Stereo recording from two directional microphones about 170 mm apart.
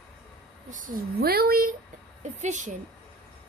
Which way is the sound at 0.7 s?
50° right (ahead or behind).